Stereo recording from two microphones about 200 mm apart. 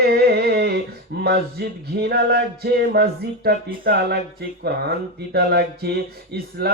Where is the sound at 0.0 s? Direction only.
55° right (ahead or behind).